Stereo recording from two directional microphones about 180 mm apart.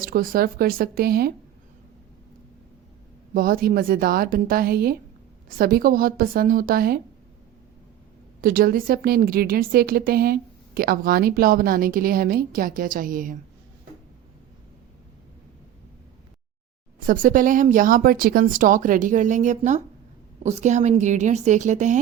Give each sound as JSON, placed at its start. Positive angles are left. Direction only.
{"t": 0.0, "sound": "a woman's voice", "side_deg": -50}
{"t": 3.3, "sound": "a woman's voice", "side_deg": -50}
{"t": 8.4, "sound": "a woman's voice", "side_deg": -55}
{"t": 17.1, "sound": "a woman's voice", "side_deg": -50}